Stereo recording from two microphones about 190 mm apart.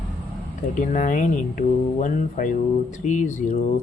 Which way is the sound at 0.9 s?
40° left (ahead or behind).